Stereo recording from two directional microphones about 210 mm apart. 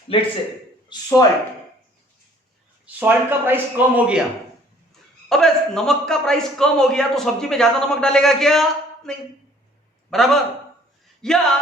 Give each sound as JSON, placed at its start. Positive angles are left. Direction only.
{"t": 0.1, "sound": "a man's voice", "side_deg": 25}
{"t": 2.8, "sound": "a man's voice", "side_deg": -10}
{"t": 5.3, "sound": "a man's voice", "side_deg": 0}